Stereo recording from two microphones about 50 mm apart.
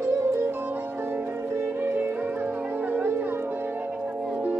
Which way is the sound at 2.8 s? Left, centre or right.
Right.